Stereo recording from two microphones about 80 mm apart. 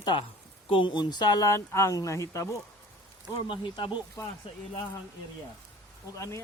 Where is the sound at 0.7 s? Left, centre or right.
Left.